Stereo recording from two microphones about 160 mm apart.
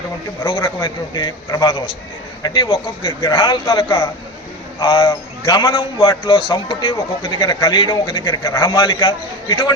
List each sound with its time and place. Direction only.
0.6 s a man's voice: 25° left (ahead or behind)